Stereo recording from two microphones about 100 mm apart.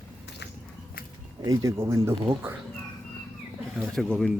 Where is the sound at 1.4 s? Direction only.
35° right (ahead or behind).